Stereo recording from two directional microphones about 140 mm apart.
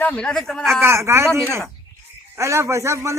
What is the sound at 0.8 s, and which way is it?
Speech, 20° right (ahead or behind).